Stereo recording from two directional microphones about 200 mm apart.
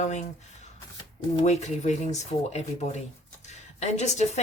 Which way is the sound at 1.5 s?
35° left (ahead or behind).